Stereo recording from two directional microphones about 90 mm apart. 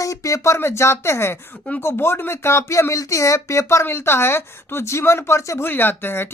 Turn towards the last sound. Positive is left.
turn(degrees=25)  # may be behind; listen again after turning